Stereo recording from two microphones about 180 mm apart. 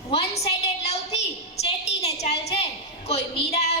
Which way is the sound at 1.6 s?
35° left (ahead or behind).